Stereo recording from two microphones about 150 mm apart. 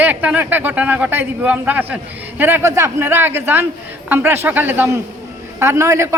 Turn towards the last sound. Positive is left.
turn(degrees=-20)  # may be behind; listen again after turning